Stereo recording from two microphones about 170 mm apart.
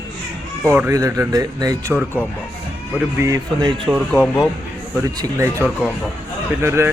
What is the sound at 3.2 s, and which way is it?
Speech, 20° right (ahead or behind).